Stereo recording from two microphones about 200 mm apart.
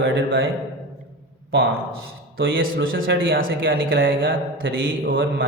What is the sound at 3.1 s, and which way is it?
Speech, 70° right (ahead or behind).